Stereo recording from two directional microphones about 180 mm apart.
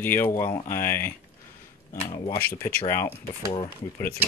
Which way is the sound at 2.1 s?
25° left (ahead or behind).